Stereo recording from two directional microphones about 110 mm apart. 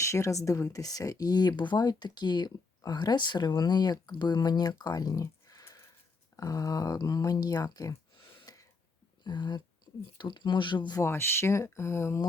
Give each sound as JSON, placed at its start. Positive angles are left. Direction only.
{"t": 0.0, "sound": "speech", "side_deg": 30}
{"t": 4.8, "sound": "a sound", "side_deg": 35}
{"t": 6.3, "sound": "speech", "side_deg": 30}
{"t": 8.5, "sound": "a sound", "side_deg": 35}
{"t": 9.2, "sound": "speech", "side_deg": 40}
{"t": 11.0, "sound": "speech", "side_deg": 20}